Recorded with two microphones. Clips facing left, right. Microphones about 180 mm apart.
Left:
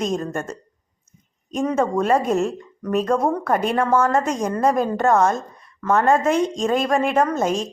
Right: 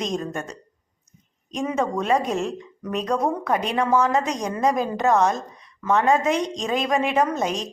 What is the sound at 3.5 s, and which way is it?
Speech, 50° left (ahead or behind).